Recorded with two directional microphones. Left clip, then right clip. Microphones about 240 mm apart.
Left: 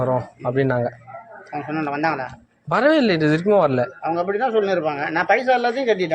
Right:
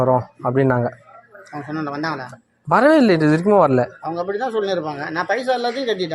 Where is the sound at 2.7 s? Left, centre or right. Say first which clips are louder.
Right 3 dB; right.